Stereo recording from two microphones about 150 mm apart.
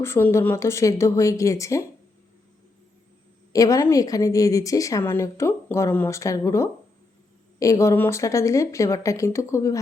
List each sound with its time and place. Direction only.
0.0 s a woman's voice: 15° left (ahead or behind)
3.5 s a woman's voice: 25° left (ahead or behind)